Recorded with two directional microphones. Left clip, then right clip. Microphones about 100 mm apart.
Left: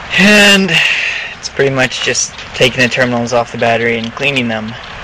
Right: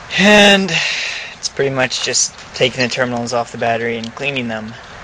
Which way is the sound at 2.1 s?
40° right (ahead or behind).